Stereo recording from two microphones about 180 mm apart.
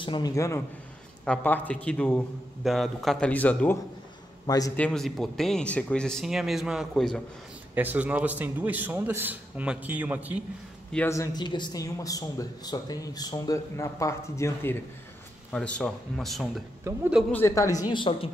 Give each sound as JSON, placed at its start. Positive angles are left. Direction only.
{"t": 0.0, "sound": "speech", "side_deg": 25}
{"t": 4.5, "sound": "speech", "side_deg": 20}
{"t": 4.7, "sound": "speech", "side_deg": 5}
{"t": 7.7, "sound": "a man's voice", "side_deg": -10}
{"t": 10.9, "sound": "speech", "side_deg": 10}
{"t": 16.8, "sound": "a man's voice", "side_deg": -10}
{"t": 17.3, "sound": "speech", "side_deg": 15}